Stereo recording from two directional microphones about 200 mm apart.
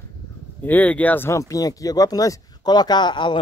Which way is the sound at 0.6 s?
10° left (ahead or behind).